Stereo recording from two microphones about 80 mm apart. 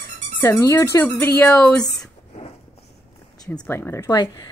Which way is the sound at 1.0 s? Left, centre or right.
Left.